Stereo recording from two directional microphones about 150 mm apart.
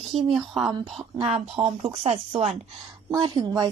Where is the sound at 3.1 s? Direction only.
30° right (ahead or behind).